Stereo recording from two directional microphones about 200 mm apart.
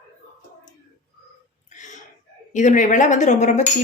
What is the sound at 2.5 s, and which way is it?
Speech, 40° left (ahead or behind).